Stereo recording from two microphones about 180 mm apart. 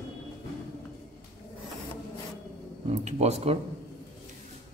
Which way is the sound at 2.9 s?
40° right (ahead or behind).